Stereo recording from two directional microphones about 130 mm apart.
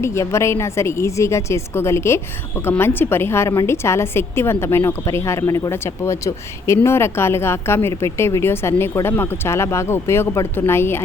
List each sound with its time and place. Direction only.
0.0 s a woman's voice: 20° left (ahead or behind)